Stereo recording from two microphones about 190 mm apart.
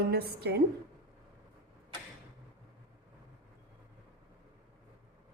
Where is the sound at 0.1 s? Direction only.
55° right (ahead or behind).